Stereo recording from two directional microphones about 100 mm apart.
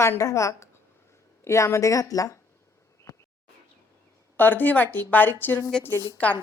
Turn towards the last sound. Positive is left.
turn(degrees=15)  # may be behind; listen again after turning